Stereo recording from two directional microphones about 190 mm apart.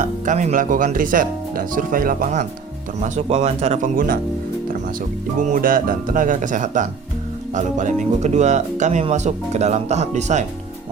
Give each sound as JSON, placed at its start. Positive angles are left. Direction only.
{"t": 0.0, "sound": "speech", "side_deg": -40}
{"t": 5.5, "sound": "speech", "side_deg": -45}